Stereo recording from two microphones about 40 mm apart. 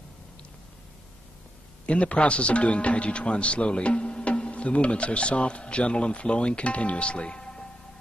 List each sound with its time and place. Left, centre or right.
1.9 s a man's voice: left